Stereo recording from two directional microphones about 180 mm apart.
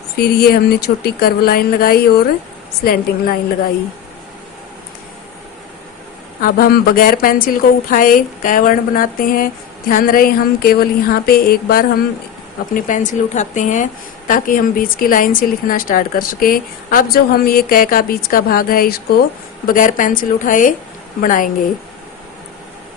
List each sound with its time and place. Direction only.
0.2 s a woman's voice: 60° left (ahead or behind)
6.4 s a woman's voice: 55° left (ahead or behind)
12.7 s a woman's voice: 45° left (ahead or behind)